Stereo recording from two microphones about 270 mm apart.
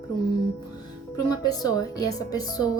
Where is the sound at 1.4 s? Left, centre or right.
Centre.